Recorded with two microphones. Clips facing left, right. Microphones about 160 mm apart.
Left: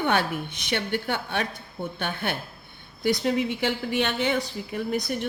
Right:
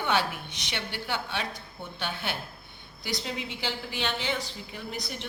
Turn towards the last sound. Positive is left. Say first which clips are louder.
# left 10 dB
turn(degrees=55)  # may be behind; listen again after turning